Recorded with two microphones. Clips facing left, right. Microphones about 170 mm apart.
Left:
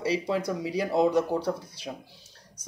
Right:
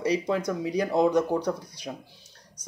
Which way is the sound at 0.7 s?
5° left (ahead or behind).